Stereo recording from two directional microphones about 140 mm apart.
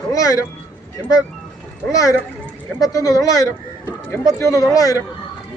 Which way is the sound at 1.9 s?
25° left (ahead or behind).